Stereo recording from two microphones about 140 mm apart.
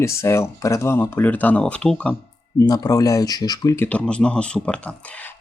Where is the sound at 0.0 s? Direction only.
20° left (ahead or behind).